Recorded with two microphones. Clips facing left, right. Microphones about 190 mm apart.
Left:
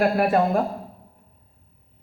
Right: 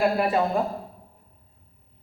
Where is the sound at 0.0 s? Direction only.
55° left (ahead or behind).